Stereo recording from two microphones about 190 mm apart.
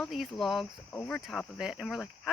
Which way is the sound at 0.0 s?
Centre (ahead or behind).